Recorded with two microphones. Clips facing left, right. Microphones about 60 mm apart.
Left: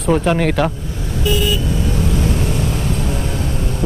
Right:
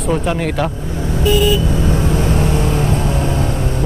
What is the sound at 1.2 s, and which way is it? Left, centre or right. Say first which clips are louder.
Vehicle: right 4 dB; right.